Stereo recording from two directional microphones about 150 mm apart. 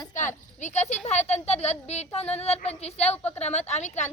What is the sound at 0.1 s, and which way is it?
A woman's voice, 55° left (ahead or behind).